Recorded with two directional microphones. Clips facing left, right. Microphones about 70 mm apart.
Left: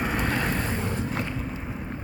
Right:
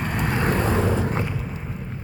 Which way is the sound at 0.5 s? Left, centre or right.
Right.